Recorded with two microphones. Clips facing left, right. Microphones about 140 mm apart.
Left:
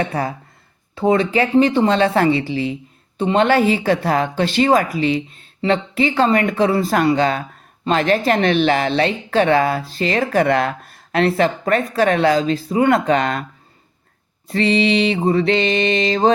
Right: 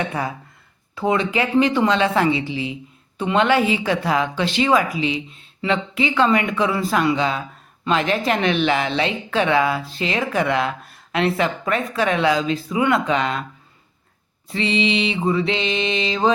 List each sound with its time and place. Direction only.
0.9 s a woman's voice: 35° left (ahead or behind)
14.4 s a woman's voice: 45° left (ahead or behind)